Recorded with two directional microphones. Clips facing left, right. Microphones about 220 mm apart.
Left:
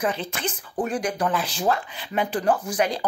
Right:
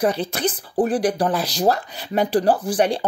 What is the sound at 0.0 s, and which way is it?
Speech, 35° right (ahead or behind).